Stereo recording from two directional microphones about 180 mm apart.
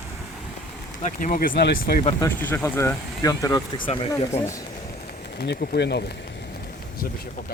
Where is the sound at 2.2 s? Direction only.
15° left (ahead or behind).